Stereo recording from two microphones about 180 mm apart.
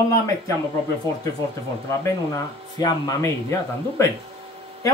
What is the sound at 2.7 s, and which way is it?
A man's voice, 20° left (ahead or behind).